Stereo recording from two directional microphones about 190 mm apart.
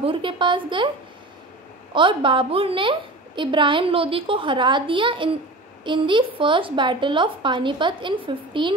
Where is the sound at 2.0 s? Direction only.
25° right (ahead or behind).